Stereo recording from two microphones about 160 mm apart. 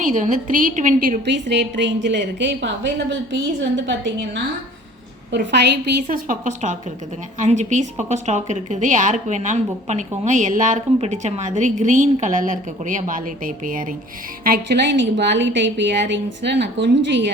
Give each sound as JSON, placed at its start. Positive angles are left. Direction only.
{"t": 0.0, "sound": "a woman's voice", "side_deg": -50}
{"t": 5.3, "sound": "a woman's voice", "side_deg": -90}
{"t": 6.2, "sound": "a woman's voice", "side_deg": -50}
{"t": 14.4, "sound": "a woman's voice", "side_deg": -80}